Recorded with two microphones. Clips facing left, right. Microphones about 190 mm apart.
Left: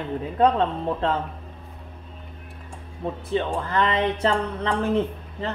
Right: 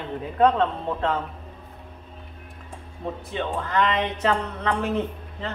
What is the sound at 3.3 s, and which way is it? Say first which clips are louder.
Speech: left 2 dB; 35° left (ahead or behind).